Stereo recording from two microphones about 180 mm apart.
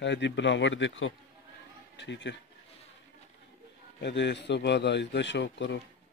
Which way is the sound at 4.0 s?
75° left (ahead or behind).